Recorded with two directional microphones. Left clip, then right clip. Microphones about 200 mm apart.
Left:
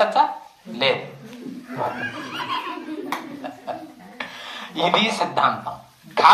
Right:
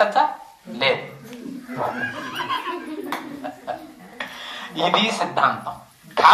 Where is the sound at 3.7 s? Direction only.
15° left (ahead or behind).